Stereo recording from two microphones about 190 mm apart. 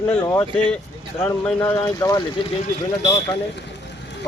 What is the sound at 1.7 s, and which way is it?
Speech, 15° left (ahead or behind).